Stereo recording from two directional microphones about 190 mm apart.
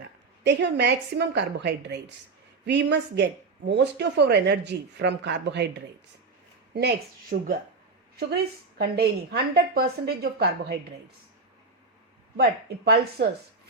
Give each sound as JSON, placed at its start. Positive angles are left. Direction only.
{"t": 0.4, "sound": "speech", "side_deg": -65}
{"t": 6.7, "sound": "speech", "side_deg": -55}
{"t": 8.8, "sound": "speech", "side_deg": -55}
{"t": 12.4, "sound": "speech", "side_deg": -60}